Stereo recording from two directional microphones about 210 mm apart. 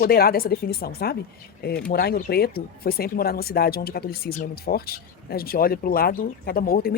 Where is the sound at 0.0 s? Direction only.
45° left (ahead or behind).